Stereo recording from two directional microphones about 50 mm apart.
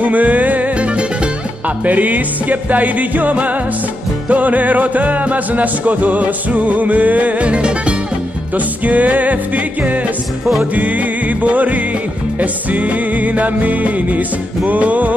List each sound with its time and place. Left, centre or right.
0.0 s music: right
10.6 s music: right